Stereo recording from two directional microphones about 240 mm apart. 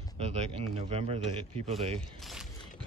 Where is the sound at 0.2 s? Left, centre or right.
Right.